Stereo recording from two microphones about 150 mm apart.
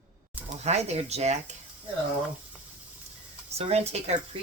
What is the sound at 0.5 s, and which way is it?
Speech, 45° right (ahead or behind).